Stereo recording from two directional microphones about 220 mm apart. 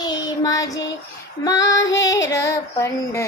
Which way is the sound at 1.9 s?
15° left (ahead or behind).